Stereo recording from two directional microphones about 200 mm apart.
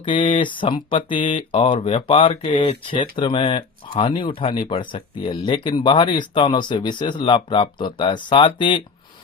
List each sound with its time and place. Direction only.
0.0 s speech: 25° left (ahead or behind)